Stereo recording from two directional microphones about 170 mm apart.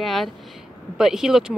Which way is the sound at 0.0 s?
Centre (ahead or behind).